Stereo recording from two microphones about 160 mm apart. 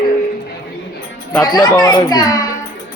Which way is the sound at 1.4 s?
25° left (ahead or behind).